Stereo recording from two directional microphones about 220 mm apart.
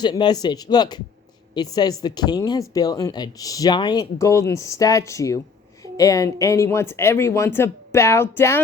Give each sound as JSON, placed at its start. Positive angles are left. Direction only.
{"t": 0.0, "sound": "speech", "side_deg": 20}